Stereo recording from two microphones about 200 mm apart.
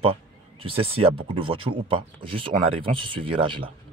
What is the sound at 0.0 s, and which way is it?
Speech, 30° right (ahead or behind).